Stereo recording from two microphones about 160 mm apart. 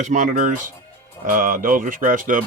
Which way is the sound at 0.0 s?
50° right (ahead or behind).